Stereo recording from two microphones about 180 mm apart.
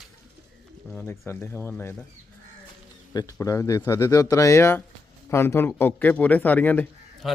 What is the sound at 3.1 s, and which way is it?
A man's voice, 20° left (ahead or behind).